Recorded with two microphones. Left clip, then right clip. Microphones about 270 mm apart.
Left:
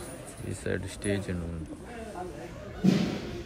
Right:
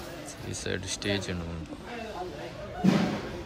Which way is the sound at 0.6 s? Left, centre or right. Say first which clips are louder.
Right 1 dB; centre.